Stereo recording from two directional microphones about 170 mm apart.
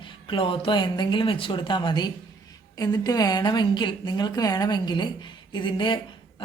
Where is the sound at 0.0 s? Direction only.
30° left (ahead or behind).